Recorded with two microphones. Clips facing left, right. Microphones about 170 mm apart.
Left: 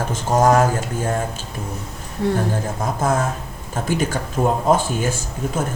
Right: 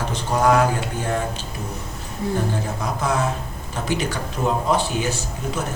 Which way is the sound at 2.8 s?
50° left (ahead or behind).